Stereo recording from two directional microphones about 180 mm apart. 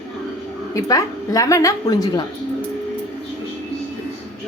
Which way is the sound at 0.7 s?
20° left (ahead or behind).